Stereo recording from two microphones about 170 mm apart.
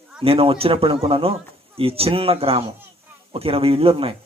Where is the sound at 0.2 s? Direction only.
35° right (ahead or behind).